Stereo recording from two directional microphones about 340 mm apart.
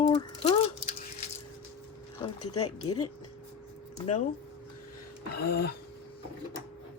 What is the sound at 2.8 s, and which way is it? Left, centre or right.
Speech, left.